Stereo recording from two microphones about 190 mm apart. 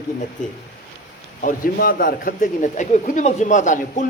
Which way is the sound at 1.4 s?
50° left (ahead or behind).